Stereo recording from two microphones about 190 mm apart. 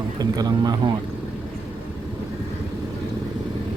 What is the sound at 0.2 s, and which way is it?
Speech, 20° right (ahead or behind).